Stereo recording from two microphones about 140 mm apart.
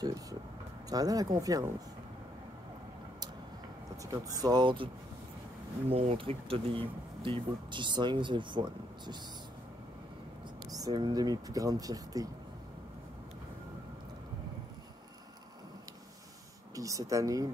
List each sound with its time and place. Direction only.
0.0 s speech: 25° right (ahead or behind)
3.9 s speech: 25° right (ahead or behind)
5.9 s speech: 45° right (ahead or behind)
10.7 s speech: 30° right (ahead or behind)
16.7 s speech: 25° right (ahead or behind)